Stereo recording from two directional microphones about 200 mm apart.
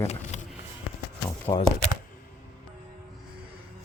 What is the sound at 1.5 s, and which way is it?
Speech, 25° left (ahead or behind).